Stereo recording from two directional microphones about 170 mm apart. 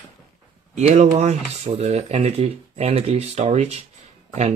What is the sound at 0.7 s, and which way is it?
Speech, 45° right (ahead or behind).